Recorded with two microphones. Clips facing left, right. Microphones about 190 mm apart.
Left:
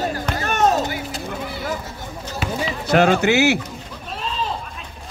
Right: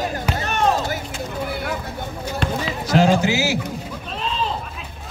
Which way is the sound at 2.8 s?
60° left (ahead or behind).